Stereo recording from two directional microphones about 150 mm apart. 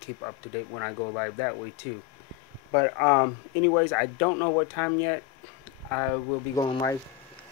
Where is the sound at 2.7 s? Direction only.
5° left (ahead or behind).